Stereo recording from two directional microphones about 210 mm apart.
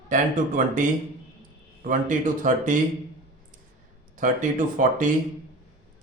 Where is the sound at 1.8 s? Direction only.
40° right (ahead or behind).